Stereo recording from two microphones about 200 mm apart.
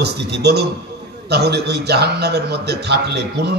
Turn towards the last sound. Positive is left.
turn(degrees=-55)  # may be behind; listen again after turning